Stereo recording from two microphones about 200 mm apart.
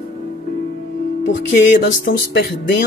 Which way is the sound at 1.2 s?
65° left (ahead or behind).